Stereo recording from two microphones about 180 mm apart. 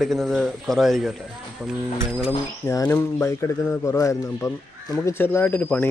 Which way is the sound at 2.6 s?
15° left (ahead or behind).